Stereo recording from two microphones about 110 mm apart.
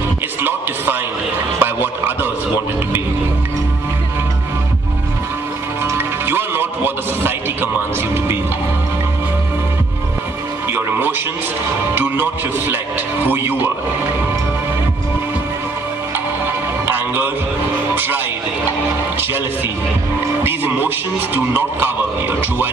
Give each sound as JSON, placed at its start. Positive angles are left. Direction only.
{"t": 0.4, "sound": "music", "side_deg": -20}
{"t": 1.6, "sound": "a sound", "side_deg": -20}
{"t": 5.9, "sound": "music", "side_deg": -20}
{"t": 10.7, "sound": "music", "side_deg": -20}
{"t": 11.9, "sound": "speech", "side_deg": -20}
{"t": 16.8, "sound": "music", "side_deg": -20}
{"t": 17.9, "sound": "speech", "side_deg": -15}
{"t": 20.4, "sound": "speech", "side_deg": -20}